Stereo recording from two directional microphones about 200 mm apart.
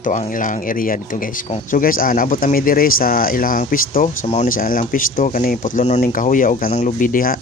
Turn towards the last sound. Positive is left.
turn(degrees=45)  # may be behind; listen again after turning